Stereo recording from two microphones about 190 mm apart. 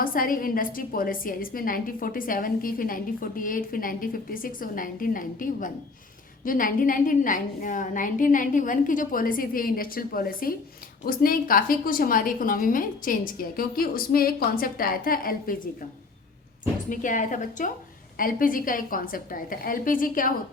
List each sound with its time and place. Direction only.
0.0 s a woman's voice: 50° left (ahead or behind)
16.9 s a woman's voice: 45° left (ahead or behind)